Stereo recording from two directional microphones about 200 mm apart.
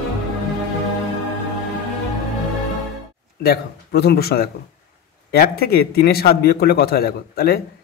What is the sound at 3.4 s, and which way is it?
A man's voice, 50° left (ahead or behind).